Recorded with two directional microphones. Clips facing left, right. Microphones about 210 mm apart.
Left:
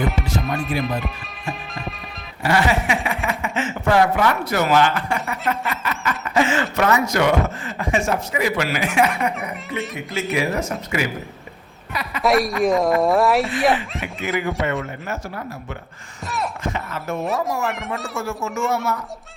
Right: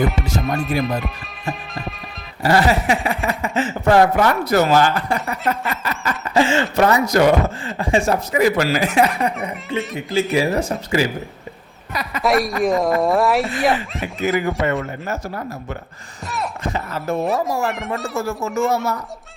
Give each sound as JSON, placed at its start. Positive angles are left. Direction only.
{"t": 0.6, "sound": "speech", "side_deg": 0}
{"t": 2.4, "sound": "speech", "side_deg": -35}
{"t": 9.7, "sound": "speech", "side_deg": 0}
{"t": 10.3, "sound": "speech", "side_deg": -30}
{"t": 12.2, "sound": "speech", "side_deg": 0}
{"t": 14.3, "sound": "a man's voice", "side_deg": -45}
{"t": 16.2, "sound": "a sound", "side_deg": 0}
{"t": 16.6, "sound": "speech", "side_deg": -35}
{"t": 17.2, "sound": "speech", "side_deg": 0}
{"t": 18.3, "sound": "speech", "side_deg": -35}